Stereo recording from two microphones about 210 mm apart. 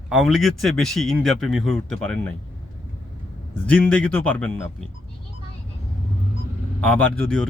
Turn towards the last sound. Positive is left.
turn(degrees=5)  # may be behind; listen again after turning